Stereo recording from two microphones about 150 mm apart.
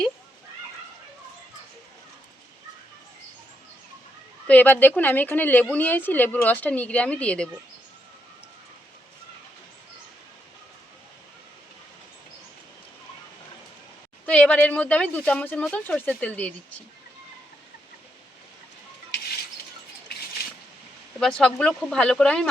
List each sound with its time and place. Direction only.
4.4 s speech: 10° left (ahead or behind)
14.3 s speech: 10° left (ahead or behind)
20.4 s a sound: 90° left
21.2 s speech: 5° left (ahead or behind)